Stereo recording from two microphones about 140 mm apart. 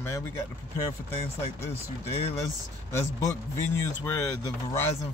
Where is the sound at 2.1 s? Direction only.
45° left (ahead or behind).